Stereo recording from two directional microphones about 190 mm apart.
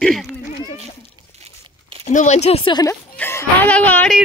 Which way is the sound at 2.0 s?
40° left (ahead or behind).